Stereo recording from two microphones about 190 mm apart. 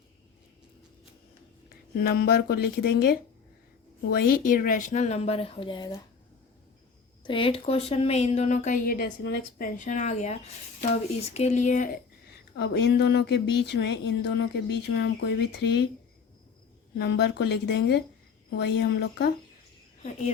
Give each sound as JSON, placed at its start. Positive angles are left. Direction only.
{"t": 1.7, "sound": "speech", "side_deg": 55}
{"t": 4.3, "sound": "speech", "side_deg": 45}
{"t": 7.3, "sound": "speech", "side_deg": 30}
{"t": 12.5, "sound": "speech", "side_deg": 65}
{"t": 17.0, "sound": "speech", "side_deg": 60}
{"t": 20.0, "sound": "speech", "side_deg": 35}